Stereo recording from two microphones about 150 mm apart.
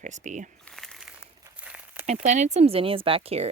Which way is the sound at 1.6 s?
10° right (ahead or behind).